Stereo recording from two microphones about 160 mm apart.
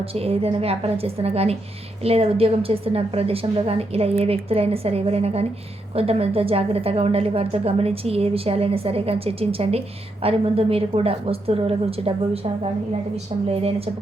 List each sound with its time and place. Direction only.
0.1 s a woman's voice: 40° right (ahead or behind)
13.5 s a woman's voice: 40° right (ahead or behind)